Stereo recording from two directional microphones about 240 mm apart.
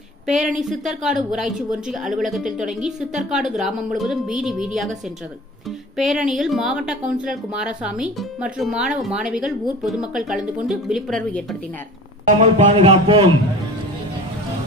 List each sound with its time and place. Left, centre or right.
0.3 s a woman's voice: centre
6.0 s a woman's voice: centre
12.5 s a man's voice: right